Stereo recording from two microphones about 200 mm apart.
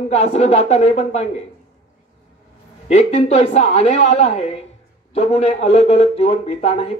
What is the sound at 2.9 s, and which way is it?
A man's voice, 35° left (ahead or behind).